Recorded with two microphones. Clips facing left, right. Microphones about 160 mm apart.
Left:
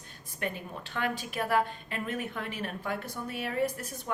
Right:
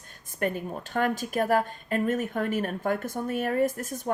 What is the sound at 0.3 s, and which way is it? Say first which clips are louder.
Speech: right 7 dB; 45° right (ahead or behind).